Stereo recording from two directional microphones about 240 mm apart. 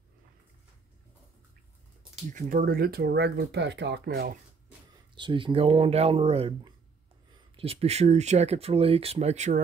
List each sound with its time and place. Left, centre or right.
2.3 s speech: right
5.1 s speech: centre